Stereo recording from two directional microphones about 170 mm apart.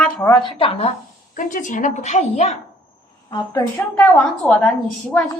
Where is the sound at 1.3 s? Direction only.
50° left (ahead or behind).